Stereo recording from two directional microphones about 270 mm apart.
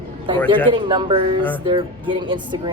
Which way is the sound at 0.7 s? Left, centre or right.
Centre.